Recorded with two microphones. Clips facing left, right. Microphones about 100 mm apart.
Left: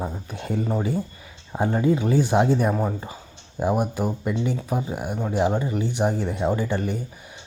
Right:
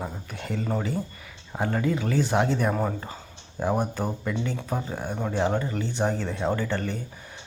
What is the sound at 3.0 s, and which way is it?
Speech, 15° left (ahead or behind).